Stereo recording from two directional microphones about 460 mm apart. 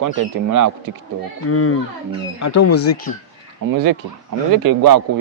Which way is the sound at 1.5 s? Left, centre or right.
Left.